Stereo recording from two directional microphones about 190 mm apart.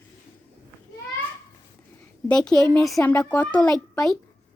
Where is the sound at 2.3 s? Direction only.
5° left (ahead or behind).